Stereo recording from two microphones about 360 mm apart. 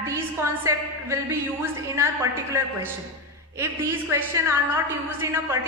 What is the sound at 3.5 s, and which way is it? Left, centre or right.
A woman's voice, centre.